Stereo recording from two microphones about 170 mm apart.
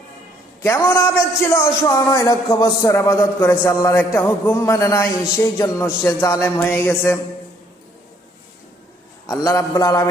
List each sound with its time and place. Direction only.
0.6 s a man's voice: 15° left (ahead or behind)
9.2 s a man's voice: 20° left (ahead or behind)